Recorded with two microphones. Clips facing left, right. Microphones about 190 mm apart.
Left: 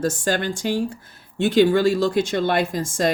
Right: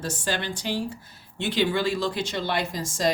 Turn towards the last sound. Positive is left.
turn(degrees=55)  # may be behind; listen again after turning